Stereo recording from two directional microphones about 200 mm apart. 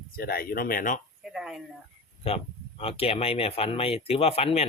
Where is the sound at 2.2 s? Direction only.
30° left (ahead or behind).